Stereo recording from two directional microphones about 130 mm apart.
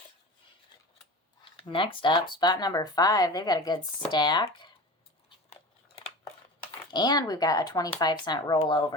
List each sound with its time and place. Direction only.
1.4 s speech: 35° left (ahead or behind)
6.9 s speech: 30° left (ahead or behind)